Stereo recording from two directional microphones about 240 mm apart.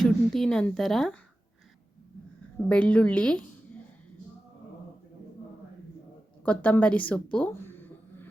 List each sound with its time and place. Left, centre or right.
0.0 s a woman's voice: centre
2.6 s a woman's voice: centre
6.4 s speech: centre